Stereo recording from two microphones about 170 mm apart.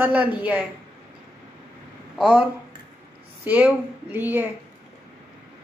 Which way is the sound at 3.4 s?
10° right (ahead or behind).